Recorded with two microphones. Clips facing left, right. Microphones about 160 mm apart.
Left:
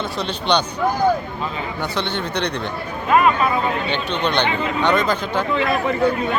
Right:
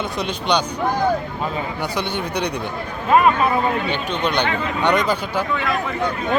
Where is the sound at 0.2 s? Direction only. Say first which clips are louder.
Left 1 dB; 10° right (ahead or behind).